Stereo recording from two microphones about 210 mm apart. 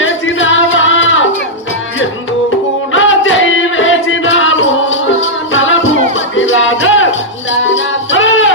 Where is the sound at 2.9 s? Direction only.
65° left (ahead or behind).